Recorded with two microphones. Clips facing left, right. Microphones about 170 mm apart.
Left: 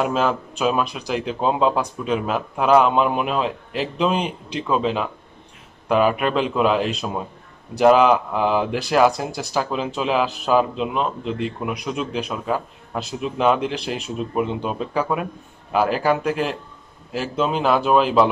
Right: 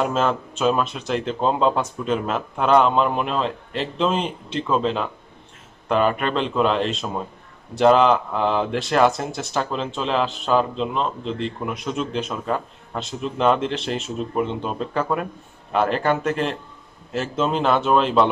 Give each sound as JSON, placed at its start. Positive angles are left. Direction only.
{"t": 0.0, "sound": "speech", "side_deg": 5}